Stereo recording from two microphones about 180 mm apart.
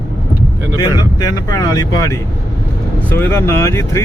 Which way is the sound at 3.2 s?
15° left (ahead or behind).